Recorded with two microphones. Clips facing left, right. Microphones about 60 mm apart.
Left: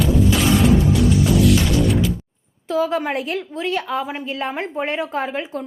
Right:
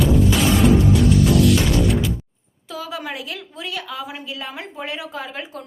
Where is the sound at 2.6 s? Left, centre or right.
Left.